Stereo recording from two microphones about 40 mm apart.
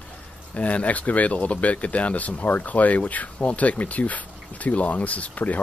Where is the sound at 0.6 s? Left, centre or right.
Left.